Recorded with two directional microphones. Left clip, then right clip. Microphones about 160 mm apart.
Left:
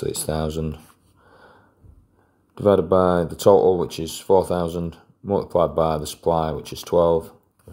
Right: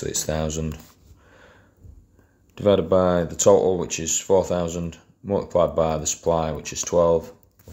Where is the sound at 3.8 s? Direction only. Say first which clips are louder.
Left 2 dB; 35° left (ahead or behind).